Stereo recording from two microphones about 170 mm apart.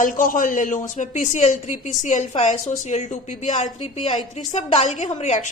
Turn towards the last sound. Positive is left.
turn(degrees=40)  # may be behind; listen again after turning